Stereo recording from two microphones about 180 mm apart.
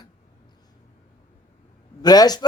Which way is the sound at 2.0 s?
20° left (ahead or behind).